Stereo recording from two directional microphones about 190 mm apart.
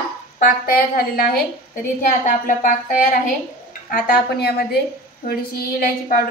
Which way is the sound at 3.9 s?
55° left (ahead or behind).